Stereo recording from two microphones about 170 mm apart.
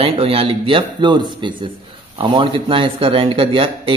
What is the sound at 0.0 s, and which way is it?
A man's voice, 35° right (ahead or behind).